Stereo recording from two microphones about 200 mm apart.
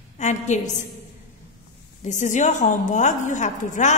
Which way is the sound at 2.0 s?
35° left (ahead or behind).